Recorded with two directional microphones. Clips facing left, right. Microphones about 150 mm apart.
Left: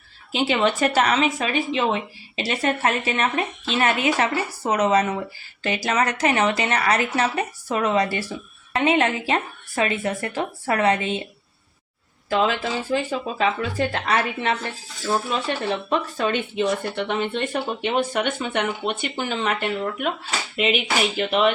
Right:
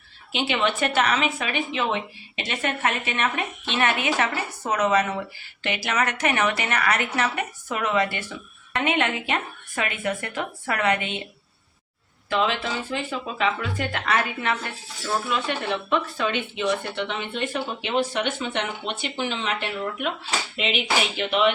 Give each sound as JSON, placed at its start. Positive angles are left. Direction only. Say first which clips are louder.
{"t": 0.3, "sound": "a woman's voice", "louder": "left 4 dB", "side_deg": 40}
{"t": 12.3, "sound": "a woman's voice", "louder": "left 3 dB", "side_deg": 40}